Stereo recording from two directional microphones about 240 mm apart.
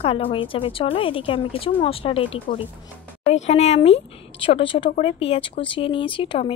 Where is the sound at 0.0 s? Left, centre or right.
Left.